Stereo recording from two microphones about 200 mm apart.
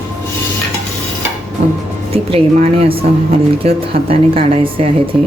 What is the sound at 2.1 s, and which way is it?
Speech, 30° right (ahead or behind).